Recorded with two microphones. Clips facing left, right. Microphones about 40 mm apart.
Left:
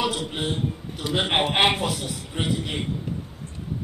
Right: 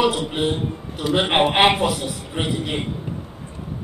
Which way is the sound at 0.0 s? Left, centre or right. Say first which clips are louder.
Right 6 dB; centre.